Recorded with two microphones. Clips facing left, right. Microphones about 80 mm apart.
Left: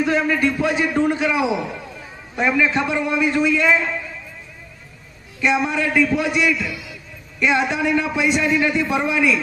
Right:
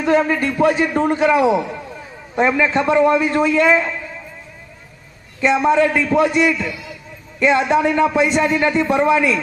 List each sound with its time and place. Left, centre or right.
0.0 s a man's voice: right
5.4 s a man's voice: right